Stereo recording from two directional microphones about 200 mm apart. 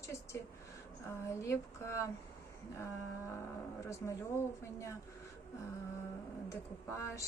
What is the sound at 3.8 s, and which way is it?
Speech, 15° left (ahead or behind).